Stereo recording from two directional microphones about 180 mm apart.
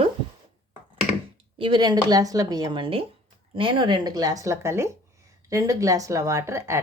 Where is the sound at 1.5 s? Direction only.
30° right (ahead or behind).